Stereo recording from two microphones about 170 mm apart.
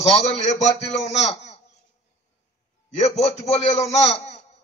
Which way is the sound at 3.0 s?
40° left (ahead or behind).